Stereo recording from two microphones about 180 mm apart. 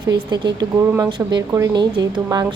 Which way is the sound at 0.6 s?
25° right (ahead or behind).